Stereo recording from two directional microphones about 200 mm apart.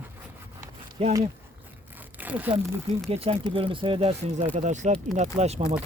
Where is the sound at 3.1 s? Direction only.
30° right (ahead or behind).